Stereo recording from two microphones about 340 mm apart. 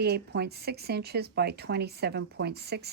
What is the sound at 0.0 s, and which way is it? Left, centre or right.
Speech, right.